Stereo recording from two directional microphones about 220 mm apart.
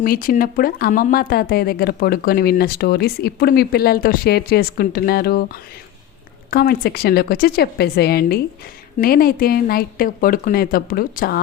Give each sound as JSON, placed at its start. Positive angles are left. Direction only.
{"t": 0.0, "sound": "speech", "side_deg": 40}
{"t": 6.5, "sound": "speech", "side_deg": 45}